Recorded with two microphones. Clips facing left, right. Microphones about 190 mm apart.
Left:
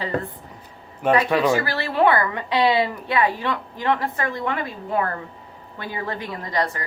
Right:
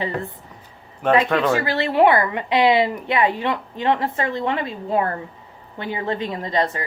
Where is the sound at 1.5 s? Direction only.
20° right (ahead or behind).